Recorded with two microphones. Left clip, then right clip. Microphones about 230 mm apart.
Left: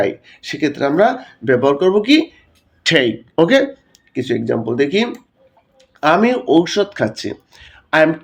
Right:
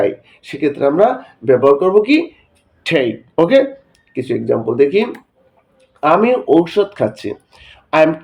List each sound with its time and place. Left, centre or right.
0.0 s speech: left